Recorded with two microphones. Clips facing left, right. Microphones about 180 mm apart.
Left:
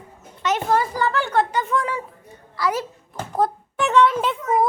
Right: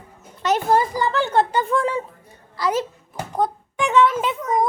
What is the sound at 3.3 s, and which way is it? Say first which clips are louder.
Speech: left 1 dB; 5° left (ahead or behind).